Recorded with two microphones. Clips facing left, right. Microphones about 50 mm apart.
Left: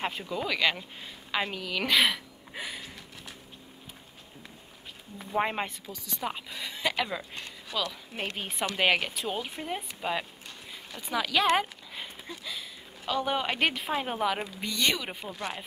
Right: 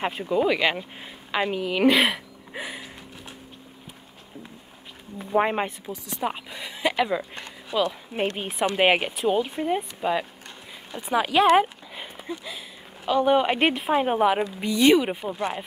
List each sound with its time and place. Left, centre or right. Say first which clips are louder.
0.0 s a woman's voice: right 9 dB; centre
2.5 s a sound: right 4 dB; centre
5.2 s a woman's voice: right 6 dB; centre
9.2 s a woman's voice: right 10 dB; centre
11.0 s speech: right 7 dB; right
11.5 s speech: right 8 dB; centre
13.6 s speech: right 7 dB; right